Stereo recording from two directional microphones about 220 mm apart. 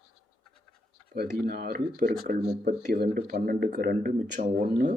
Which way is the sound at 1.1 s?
40° right (ahead or behind).